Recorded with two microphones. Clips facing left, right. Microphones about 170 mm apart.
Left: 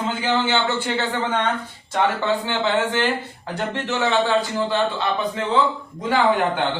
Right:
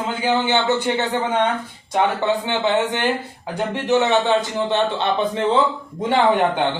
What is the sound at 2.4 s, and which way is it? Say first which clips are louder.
A man's voice: right 2 dB; 20° right (ahead or behind).